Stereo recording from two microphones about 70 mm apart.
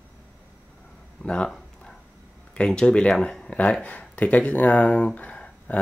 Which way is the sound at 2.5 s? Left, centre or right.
Centre.